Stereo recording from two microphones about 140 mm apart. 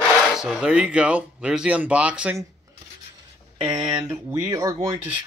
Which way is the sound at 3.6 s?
30° right (ahead or behind).